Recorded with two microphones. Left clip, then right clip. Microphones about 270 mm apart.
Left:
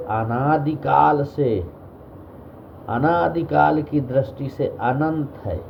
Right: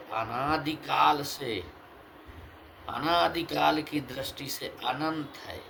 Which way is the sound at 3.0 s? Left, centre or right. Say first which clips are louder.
Left 7 dB; right.